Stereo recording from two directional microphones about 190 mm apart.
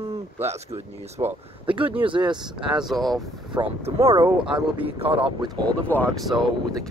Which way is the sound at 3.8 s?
30° right (ahead or behind).